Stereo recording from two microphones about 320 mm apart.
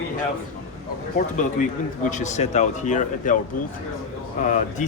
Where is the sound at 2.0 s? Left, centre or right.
Left.